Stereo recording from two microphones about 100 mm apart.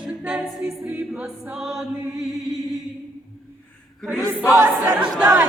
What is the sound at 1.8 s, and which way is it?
Chant, centre (ahead or behind).